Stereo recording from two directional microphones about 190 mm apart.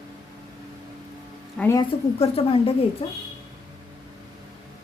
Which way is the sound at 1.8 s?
30° left (ahead or behind).